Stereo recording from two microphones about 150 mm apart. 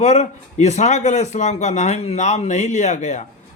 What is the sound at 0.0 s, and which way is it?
Speech, 50° left (ahead or behind).